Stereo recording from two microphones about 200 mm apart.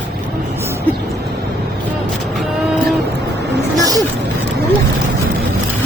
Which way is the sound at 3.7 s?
20° right (ahead or behind).